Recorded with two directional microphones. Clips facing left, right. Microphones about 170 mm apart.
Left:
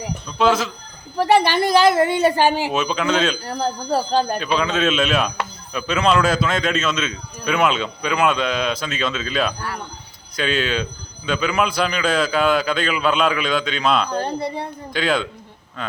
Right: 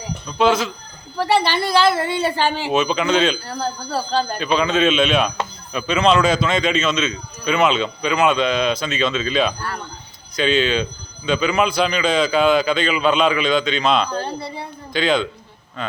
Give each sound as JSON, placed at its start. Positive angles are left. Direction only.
{"t": 0.3, "sound": "a man's voice", "side_deg": 0}
{"t": 1.5, "sound": "a woman's voice", "side_deg": 45}
{"t": 2.8, "sound": "a man's voice", "side_deg": 0}
{"t": 3.4, "sound": "speech", "side_deg": 15}
{"t": 4.4, "sound": "a man's voice", "side_deg": 0}
{"t": 14.1, "sound": "speech", "side_deg": 15}
{"t": 14.9, "sound": "a man's voice", "side_deg": 5}